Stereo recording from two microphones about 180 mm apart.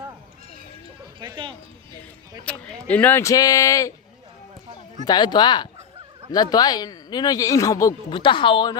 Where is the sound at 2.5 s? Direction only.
5° left (ahead or behind).